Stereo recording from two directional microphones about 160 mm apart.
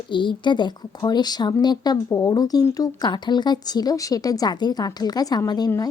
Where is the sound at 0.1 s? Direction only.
30° left (ahead or behind).